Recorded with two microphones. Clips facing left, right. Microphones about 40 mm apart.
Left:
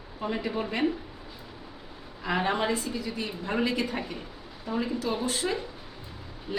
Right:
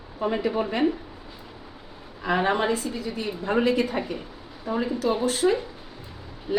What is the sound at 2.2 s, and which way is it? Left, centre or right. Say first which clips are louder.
A woman's voice: right 4 dB; right.